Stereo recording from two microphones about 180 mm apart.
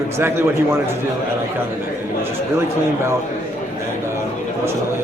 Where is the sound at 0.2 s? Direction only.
15° right (ahead or behind).